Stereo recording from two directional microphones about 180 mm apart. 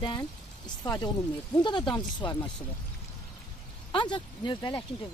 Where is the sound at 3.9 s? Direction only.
25° left (ahead or behind).